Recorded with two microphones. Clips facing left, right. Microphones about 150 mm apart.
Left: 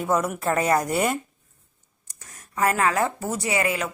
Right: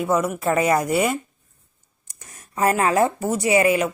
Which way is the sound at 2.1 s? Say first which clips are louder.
Right 1 dB; 25° right (ahead or behind).